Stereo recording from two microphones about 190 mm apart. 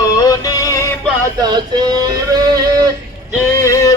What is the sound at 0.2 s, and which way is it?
Synthetic singing, 20° left (ahead or behind).